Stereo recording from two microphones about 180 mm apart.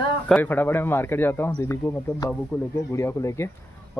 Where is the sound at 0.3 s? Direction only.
10° left (ahead or behind).